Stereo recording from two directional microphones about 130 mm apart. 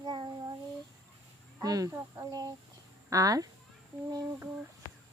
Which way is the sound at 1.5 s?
30° right (ahead or behind).